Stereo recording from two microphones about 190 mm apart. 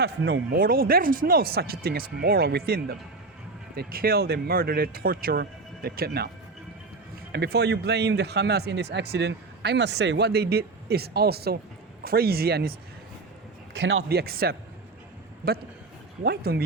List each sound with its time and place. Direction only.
0.0 s speech: 65° right (ahead or behind)
7.3 s speech: 60° right (ahead or behind)
13.7 s speech: 80° right; by 14.5 s 55° right (ahead or behind)
16.2 s speech: 55° right (ahead or behind)